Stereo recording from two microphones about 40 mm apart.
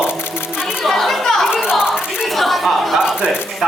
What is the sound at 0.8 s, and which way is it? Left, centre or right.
Speech, centre.